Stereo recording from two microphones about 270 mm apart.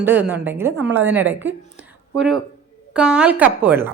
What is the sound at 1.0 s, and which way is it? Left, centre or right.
Speech, centre.